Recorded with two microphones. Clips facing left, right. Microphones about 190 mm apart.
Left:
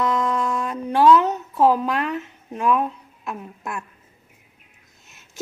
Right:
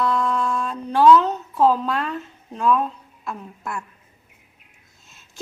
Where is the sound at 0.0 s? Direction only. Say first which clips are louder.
Even; 15° left (ahead or behind).